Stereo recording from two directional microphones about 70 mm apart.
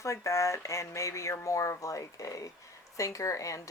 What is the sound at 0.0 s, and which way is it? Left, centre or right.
Speech, left.